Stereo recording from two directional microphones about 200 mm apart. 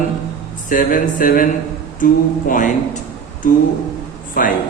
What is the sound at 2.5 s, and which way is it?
Speech, 40° left (ahead or behind).